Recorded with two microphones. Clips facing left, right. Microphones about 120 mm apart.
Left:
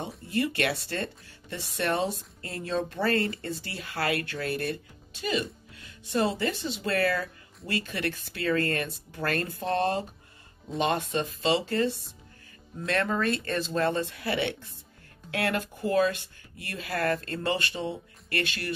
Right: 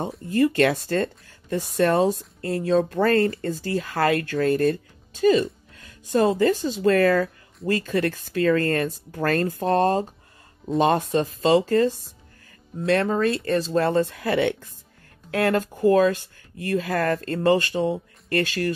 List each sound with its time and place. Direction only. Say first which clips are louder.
0.3 s speech: right 9 dB; 45° right (ahead or behind)